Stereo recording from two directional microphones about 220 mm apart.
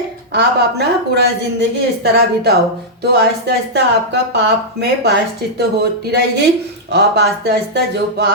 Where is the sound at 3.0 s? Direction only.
50° right (ahead or behind).